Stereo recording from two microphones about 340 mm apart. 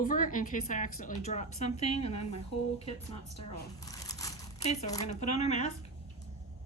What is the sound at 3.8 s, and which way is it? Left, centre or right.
Crumpling, centre.